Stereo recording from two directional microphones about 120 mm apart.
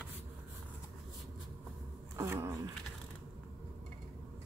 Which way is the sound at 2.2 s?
20° right (ahead or behind).